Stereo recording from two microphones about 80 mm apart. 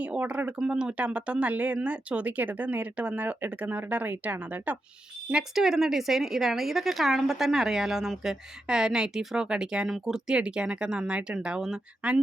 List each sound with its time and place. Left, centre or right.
0.0 s speech: centre
5.3 s a woman's voice: centre